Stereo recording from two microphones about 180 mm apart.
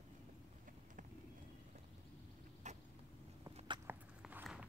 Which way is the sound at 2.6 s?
40° right (ahead or behind).